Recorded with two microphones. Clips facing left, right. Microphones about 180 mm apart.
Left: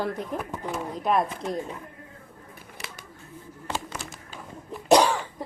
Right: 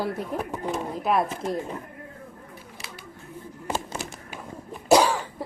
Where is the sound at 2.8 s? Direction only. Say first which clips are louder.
Left 4 dB; 55° left (ahead or behind).